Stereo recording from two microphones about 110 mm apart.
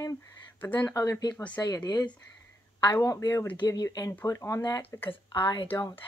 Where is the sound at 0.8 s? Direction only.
30° left (ahead or behind).